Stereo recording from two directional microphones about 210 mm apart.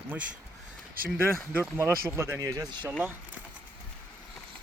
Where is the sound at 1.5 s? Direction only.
10° right (ahead or behind).